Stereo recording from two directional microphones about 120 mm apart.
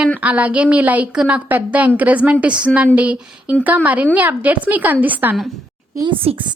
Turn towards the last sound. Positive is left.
turn(degrees=-50)  # may be behind; listen again after turning